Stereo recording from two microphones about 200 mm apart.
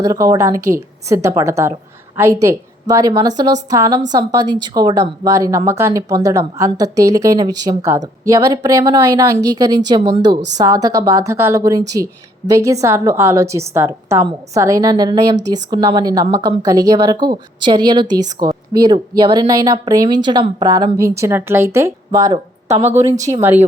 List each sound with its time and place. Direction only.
0.0 s a woman's voice: 15° right (ahead or behind)
22.7 s a woman's voice: 35° right (ahead or behind)
23.4 s speech: 10° right (ahead or behind)